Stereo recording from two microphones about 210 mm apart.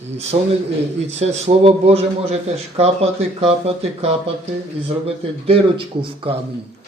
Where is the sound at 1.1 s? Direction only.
30° right (ahead or behind).